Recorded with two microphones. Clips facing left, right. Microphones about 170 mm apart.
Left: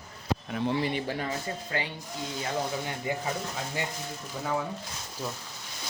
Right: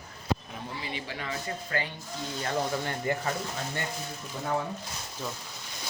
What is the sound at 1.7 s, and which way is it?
Speech, 20° left (ahead or behind).